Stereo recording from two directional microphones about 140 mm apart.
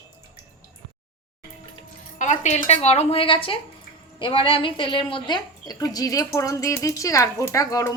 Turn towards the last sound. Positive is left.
turn(degrees=25)  # may be behind; listen again after turning